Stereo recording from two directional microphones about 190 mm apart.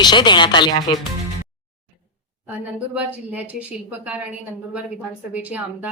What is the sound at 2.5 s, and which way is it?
A woman's voice, 10° right (ahead or behind).